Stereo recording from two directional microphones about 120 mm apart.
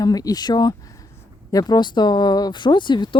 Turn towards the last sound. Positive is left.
turn(degrees=40)  # may be behind; listen again after turning